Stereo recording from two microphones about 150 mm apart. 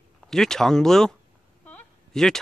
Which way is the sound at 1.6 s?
5° left (ahead or behind).